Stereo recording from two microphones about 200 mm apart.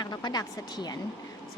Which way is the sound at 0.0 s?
20° left (ahead or behind).